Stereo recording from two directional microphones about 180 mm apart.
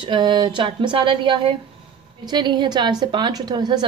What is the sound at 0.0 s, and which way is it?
A woman's voice, 25° right (ahead or behind).